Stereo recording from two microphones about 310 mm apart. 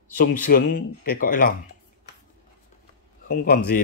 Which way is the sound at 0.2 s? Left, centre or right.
Left.